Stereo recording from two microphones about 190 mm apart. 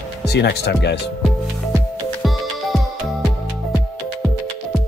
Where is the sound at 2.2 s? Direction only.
Centre (ahead or behind).